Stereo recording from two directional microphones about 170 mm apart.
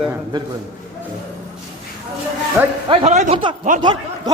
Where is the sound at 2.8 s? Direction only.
40° right (ahead or behind).